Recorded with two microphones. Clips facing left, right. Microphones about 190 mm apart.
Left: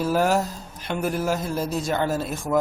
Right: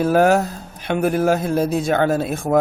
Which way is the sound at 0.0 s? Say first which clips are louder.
Right 6 dB; 60° right (ahead or behind).